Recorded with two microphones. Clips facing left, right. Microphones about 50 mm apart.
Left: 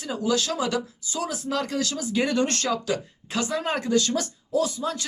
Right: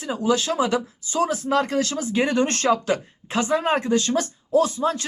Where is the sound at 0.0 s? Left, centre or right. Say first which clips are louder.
Right 3 dB; right.